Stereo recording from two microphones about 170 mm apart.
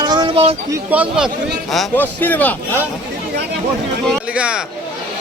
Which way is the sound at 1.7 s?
5° left (ahead or behind).